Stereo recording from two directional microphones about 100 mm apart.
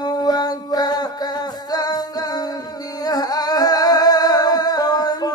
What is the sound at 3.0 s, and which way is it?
Singing, 40° left (ahead or behind).